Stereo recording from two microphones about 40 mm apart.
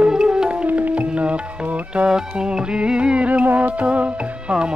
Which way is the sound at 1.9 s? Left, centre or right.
Right.